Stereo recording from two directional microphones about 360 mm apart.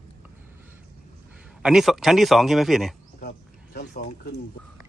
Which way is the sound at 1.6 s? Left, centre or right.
Centre.